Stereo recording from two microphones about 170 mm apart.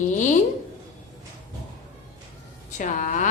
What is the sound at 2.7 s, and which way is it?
Speech, 50° left (ahead or behind).